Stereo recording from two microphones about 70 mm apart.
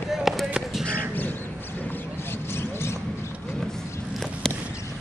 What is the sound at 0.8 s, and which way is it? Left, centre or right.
Crow, left.